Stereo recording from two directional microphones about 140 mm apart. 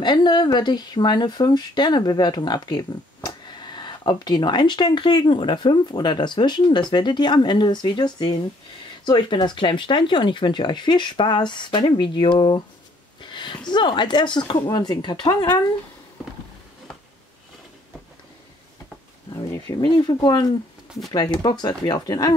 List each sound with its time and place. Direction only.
0.0 s speech: 30° left (ahead or behind)
13.2 s a sound: 35° left (ahead or behind)
13.7 s speech: 35° left (ahead or behind)
19.3 s speech: 30° left (ahead or behind)